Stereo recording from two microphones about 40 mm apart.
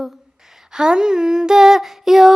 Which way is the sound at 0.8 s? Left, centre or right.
Centre.